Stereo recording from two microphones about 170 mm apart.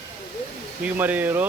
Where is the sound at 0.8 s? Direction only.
10° right (ahead or behind).